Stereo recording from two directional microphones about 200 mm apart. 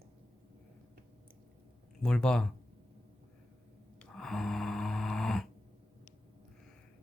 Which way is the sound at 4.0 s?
5° left (ahead or behind).